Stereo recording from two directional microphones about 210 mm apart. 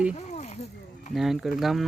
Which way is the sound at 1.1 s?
Centre (ahead or behind).